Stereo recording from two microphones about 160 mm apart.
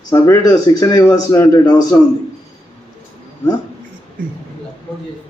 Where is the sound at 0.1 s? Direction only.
20° left (ahead or behind).